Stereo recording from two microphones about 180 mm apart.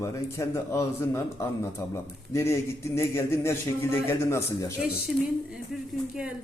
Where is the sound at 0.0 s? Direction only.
15° left (ahead or behind).